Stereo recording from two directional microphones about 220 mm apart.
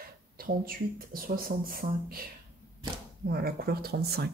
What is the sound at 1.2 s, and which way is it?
Speech, 40° right (ahead or behind).